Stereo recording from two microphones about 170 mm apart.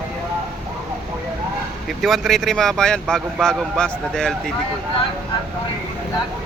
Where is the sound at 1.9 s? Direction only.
Centre (ahead or behind).